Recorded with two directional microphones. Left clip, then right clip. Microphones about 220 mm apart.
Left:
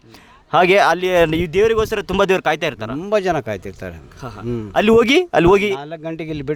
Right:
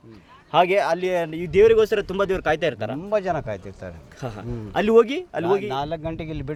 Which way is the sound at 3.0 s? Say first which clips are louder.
Left 7 dB; 45° left (ahead or behind).